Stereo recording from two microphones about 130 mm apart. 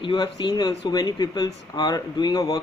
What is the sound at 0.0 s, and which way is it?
Speech, 35° left (ahead or behind).